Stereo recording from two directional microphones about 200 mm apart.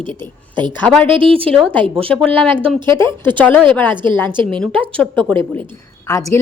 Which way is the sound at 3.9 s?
25° right (ahead or behind).